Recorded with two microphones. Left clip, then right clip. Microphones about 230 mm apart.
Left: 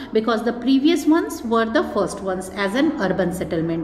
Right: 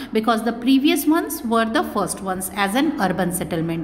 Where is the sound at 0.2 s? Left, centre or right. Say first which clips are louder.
Right 2 dB; right.